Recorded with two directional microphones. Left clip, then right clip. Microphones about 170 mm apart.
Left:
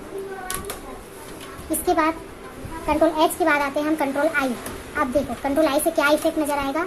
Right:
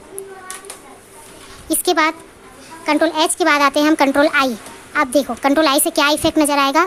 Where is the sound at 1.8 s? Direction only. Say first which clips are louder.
Right 4 dB; 40° right (ahead or behind).